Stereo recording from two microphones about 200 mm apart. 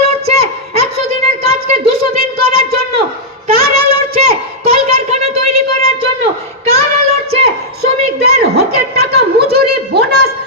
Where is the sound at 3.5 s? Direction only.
45° right (ahead or behind).